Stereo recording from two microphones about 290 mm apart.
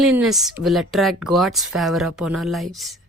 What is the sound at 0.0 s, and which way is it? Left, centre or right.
Speech, centre.